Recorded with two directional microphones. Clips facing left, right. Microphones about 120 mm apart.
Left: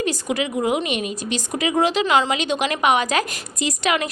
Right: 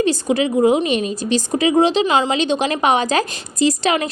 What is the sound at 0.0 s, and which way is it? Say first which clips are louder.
A woman's voice: right 6 dB; 30° right (ahead or behind).